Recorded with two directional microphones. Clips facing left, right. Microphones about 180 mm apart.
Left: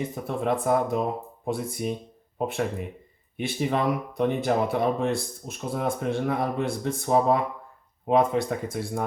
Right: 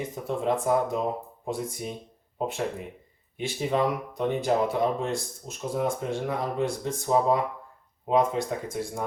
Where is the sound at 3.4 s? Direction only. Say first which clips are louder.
Left 1 dB; 60° left (ahead or behind).